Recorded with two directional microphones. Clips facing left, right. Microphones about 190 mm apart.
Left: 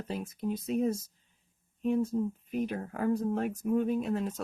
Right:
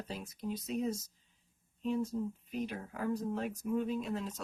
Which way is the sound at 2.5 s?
55° left (ahead or behind).